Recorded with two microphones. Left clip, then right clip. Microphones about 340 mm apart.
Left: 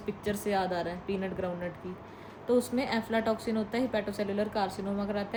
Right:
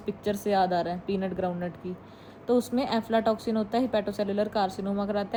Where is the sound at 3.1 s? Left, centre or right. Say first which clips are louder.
Right 4 dB; centre.